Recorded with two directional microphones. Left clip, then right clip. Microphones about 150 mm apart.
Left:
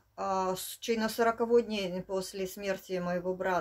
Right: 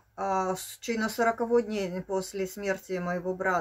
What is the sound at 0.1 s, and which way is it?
Speech, 15° left (ahead or behind).